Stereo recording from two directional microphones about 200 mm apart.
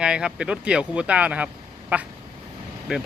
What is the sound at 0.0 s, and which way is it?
Speech, 5° right (ahead or behind).